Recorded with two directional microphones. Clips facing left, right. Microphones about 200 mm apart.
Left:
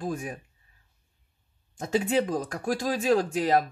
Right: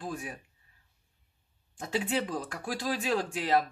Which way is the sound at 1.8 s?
45° left (ahead or behind).